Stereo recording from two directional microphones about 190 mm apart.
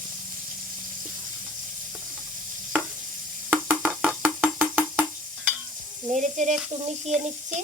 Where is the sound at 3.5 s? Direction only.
10° right (ahead or behind).